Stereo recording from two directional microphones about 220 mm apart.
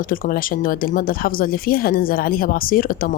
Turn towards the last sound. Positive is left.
turn(degrees=40)  # may be behind; listen again after turning